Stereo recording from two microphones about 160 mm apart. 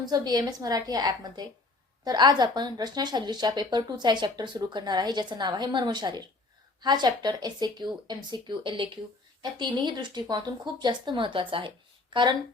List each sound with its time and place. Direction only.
0.0 s speech: 25° right (ahead or behind)